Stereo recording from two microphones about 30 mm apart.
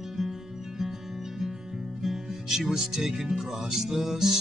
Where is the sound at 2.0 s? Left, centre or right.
Centre.